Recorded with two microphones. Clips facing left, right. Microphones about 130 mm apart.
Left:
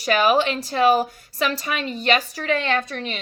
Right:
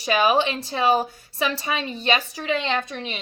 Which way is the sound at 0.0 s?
20° right (ahead or behind).